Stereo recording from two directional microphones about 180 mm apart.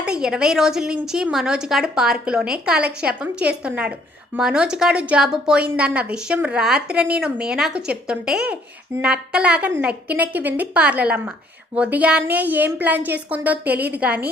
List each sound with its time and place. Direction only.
0.0 s a woman's voice: 5° right (ahead or behind)